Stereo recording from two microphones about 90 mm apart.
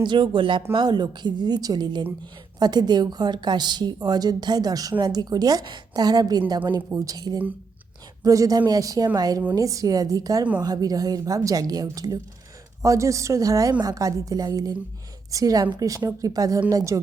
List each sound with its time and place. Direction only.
0.0 s a woman's voice: 60° right (ahead or behind)